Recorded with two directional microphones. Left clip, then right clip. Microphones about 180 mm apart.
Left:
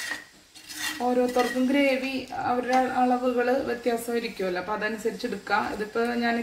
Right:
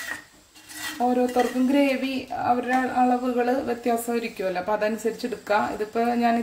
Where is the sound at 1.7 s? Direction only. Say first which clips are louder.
Right 1 dB; 70° right (ahead or behind).